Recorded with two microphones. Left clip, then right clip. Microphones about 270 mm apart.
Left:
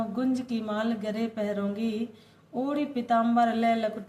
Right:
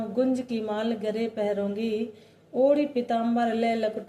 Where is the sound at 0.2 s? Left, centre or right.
Left.